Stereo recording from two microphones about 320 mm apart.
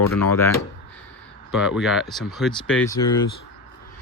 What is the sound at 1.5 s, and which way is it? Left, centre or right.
Speech, centre.